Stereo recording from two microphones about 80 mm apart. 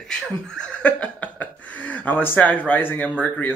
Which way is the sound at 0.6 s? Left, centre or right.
Centre.